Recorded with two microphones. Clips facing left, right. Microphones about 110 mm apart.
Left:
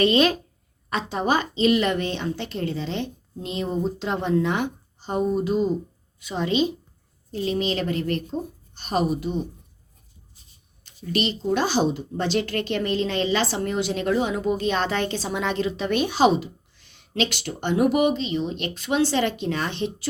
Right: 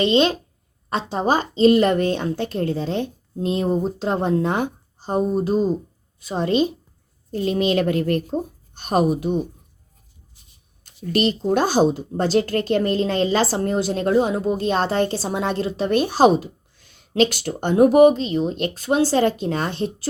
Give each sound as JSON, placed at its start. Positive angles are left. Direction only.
{"t": 0.0, "sound": "a woman's voice", "side_deg": -25}
{"t": 10.8, "sound": "speech", "side_deg": -45}